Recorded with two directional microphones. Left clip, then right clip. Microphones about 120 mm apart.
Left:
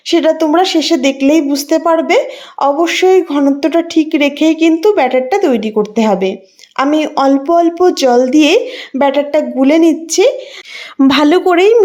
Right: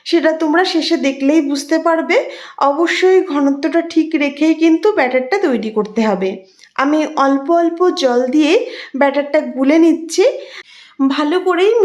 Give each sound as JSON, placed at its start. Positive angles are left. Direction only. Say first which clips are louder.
{"t": 0.1, "sound": "a woman's voice", "louder": "left 3 dB", "side_deg": 30}
{"t": 11.1, "sound": "a woman's voice", "louder": "left 6 dB", "side_deg": 80}